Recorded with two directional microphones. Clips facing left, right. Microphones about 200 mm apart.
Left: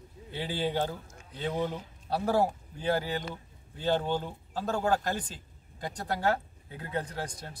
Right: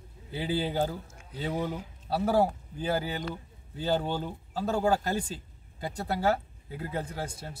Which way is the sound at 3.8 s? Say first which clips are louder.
Even; 5° right (ahead or behind).